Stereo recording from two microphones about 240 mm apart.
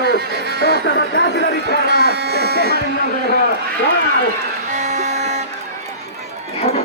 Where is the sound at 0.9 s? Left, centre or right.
Left.